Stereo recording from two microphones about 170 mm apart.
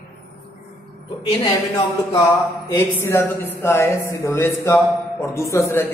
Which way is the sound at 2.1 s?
15° left (ahead or behind).